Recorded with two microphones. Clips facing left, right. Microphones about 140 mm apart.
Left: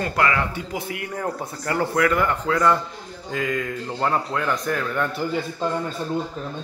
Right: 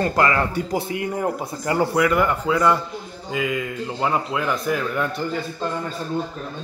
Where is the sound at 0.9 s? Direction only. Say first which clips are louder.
Right 4 dB; 20° right (ahead or behind); by 5.1 s 5° right (ahead or behind).